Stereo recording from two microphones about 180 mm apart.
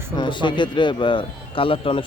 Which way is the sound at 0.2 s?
25° left (ahead or behind).